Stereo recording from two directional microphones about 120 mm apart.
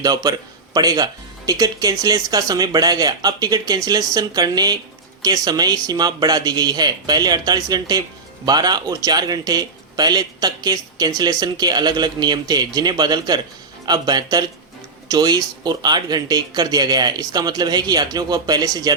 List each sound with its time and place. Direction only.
0.0 s speech: 35° right (ahead or behind)